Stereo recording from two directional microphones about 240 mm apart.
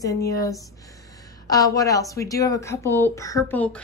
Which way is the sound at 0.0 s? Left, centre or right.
Centre.